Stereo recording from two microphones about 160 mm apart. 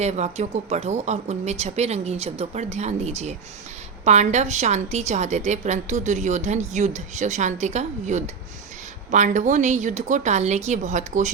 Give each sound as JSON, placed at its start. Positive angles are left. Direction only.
{"t": 0.0, "sound": "a woman's voice", "side_deg": -45}